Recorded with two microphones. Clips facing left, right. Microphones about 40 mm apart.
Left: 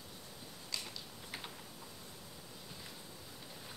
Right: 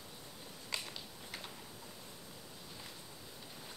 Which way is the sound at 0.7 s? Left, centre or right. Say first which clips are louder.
Right 2 dB; right.